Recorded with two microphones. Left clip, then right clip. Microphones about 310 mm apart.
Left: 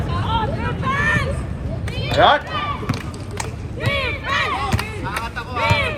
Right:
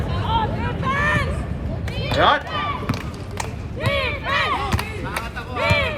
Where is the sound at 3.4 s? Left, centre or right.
Right.